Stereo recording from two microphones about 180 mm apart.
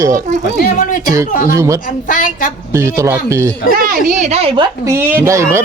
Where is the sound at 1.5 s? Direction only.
15° right (ahead or behind).